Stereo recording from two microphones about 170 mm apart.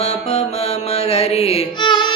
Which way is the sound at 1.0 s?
40° left (ahead or behind).